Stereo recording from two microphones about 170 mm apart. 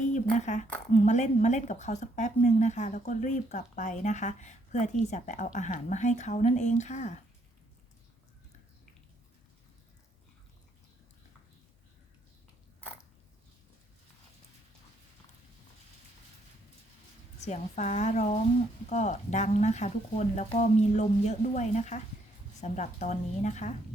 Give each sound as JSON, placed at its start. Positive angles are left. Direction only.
{"t": 0.0, "sound": "speech", "side_deg": 45}
{"t": 17.4, "sound": "speech", "side_deg": 45}